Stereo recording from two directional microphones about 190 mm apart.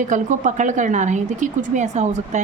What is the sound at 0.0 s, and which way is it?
A woman's voice, 40° right (ahead or behind).